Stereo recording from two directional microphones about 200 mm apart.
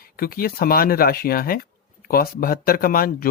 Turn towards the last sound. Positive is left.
turn(degrees=45)  # may be behind; listen again after turning